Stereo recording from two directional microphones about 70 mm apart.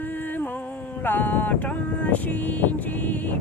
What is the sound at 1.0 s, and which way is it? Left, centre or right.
Vehicle, left.